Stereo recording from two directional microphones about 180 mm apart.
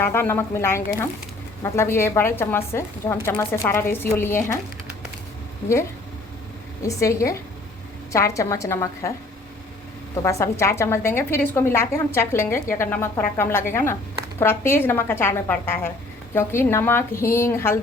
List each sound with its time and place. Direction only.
0.0 s a woman's voice: 15° left (ahead or behind)
6.8 s a woman's voice: 15° left (ahead or behind)
10.2 s a woman's voice: 15° left (ahead or behind)